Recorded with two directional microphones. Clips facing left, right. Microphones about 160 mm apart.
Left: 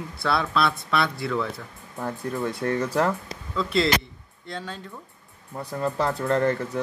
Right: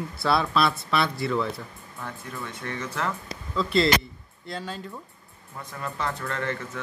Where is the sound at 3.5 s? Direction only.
Centre (ahead or behind).